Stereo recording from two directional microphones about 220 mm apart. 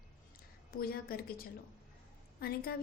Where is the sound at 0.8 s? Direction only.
45° left (ahead or behind).